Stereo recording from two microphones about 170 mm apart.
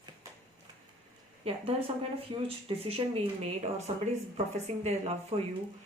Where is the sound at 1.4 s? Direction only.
35° right (ahead or behind).